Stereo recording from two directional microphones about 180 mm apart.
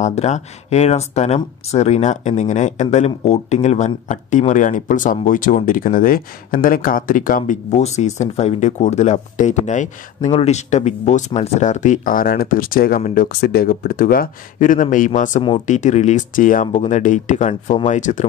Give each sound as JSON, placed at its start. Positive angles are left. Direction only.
{"t": 0.0, "sound": "speech", "side_deg": 40}
{"t": 7.7, "sound": "speech", "side_deg": 40}